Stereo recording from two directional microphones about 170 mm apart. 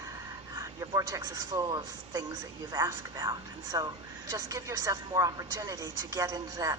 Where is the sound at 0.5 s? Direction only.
20° right (ahead or behind).